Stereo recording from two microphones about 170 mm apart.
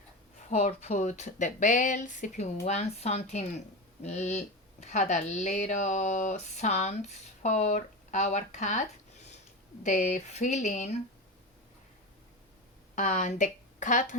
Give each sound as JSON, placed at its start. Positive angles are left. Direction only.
{"t": 0.5, "sound": "speech", "side_deg": 40}
{"t": 9.8, "sound": "speech", "side_deg": 45}
{"t": 13.0, "sound": "speech", "side_deg": 45}